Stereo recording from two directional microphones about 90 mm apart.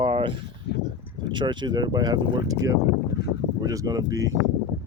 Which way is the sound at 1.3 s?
60° right (ahead or behind).